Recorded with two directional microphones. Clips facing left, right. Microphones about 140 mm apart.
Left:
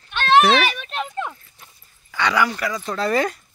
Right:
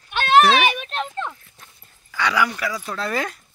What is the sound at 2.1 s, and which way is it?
Speech, 5° right (ahead or behind).